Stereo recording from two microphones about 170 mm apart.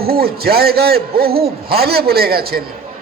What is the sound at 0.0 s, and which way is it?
A man's voice, 65° right (ahead or behind).